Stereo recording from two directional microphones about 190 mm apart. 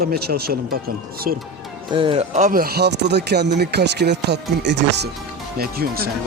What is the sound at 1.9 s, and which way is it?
Speech, 30° right (ahead or behind).